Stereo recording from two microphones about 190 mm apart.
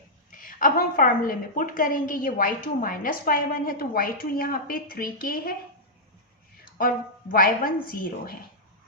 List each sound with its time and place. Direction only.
0.3 s a woman's voice: 45° left (ahead or behind)
6.7 s a woman's voice: 50° left (ahead or behind)